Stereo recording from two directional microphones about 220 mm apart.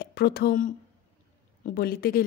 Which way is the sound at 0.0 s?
45° left (ahead or behind).